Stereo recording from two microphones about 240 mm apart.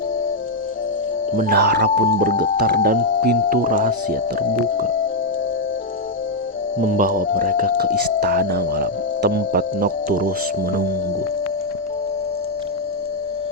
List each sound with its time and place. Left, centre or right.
1.4 s speech: right
6.7 s speech: right